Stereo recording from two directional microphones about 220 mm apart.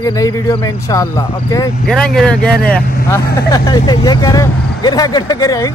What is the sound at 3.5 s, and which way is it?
Speech, 20° left (ahead or behind).